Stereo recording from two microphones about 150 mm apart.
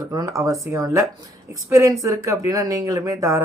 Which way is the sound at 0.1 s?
25° right (ahead or behind).